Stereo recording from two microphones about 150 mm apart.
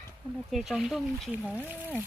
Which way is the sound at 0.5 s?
Centre (ahead or behind).